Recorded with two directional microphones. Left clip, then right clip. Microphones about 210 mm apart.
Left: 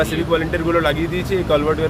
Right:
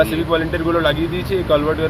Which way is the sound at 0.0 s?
5° left (ahead or behind).